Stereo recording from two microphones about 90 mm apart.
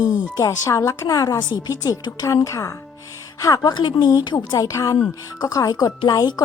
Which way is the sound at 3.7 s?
60° left (ahead or behind).